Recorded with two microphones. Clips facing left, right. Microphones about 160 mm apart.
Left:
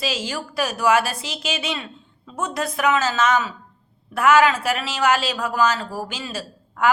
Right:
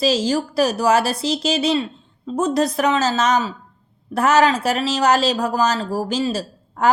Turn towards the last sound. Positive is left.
turn(degrees=-40)  # may be behind; listen again after turning